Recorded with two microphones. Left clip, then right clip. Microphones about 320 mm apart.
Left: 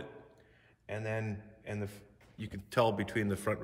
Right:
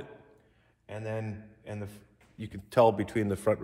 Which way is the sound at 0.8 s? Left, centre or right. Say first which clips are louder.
Right 1 dB; centre.